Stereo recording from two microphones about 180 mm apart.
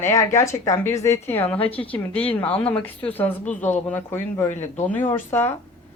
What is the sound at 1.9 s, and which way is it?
Speech, 5° left (ahead or behind).